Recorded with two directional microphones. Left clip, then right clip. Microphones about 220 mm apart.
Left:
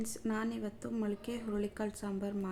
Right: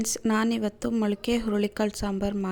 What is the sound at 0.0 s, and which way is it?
A woman's voice, 40° right (ahead or behind).